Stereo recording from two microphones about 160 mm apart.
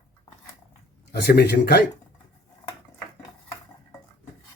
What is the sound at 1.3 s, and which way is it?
Speech, 80° left.